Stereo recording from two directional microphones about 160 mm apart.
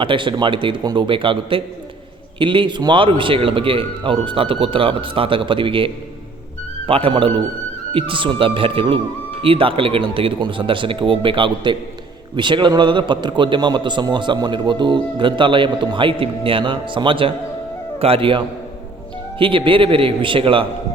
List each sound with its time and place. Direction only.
0.0 s a man's voice: 30° right (ahead or behind)